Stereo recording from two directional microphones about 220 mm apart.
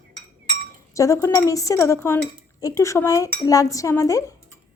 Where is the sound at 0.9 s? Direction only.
15° left (ahead or behind).